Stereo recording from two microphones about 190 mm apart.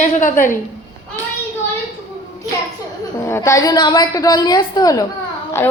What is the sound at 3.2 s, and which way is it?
A woman's voice, 15° left (ahead or behind).